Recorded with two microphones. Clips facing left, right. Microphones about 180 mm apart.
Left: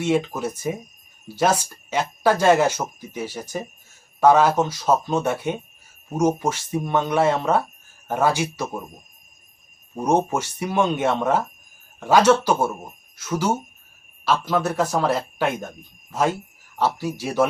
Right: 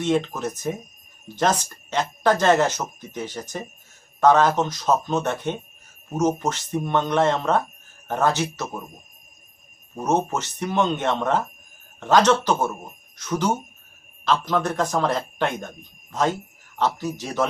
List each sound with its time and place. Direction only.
0.0 s speech: 10° left (ahead or behind)
9.9 s speech: 15° left (ahead or behind)